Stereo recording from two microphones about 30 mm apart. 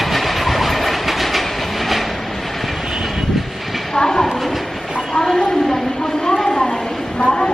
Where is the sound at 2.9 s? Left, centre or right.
Centre.